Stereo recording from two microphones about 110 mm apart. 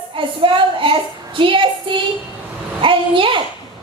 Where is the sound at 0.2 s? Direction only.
50° right (ahead or behind).